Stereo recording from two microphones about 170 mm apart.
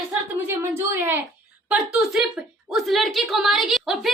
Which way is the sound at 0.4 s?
10° right (ahead or behind).